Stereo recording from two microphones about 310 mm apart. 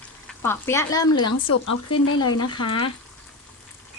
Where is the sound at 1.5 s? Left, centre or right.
Left.